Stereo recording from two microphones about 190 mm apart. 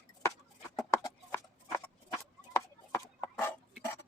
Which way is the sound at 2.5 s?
15° left (ahead or behind).